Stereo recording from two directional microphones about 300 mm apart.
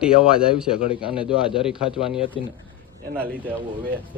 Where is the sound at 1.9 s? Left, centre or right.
Centre.